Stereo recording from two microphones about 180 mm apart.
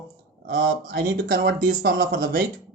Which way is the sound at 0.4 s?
55° right (ahead or behind).